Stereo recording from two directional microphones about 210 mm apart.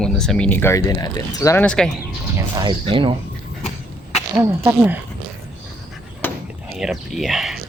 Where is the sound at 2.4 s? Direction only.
20° right (ahead or behind).